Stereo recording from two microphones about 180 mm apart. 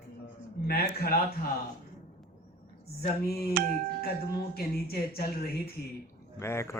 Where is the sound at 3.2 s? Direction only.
60° left (ahead or behind).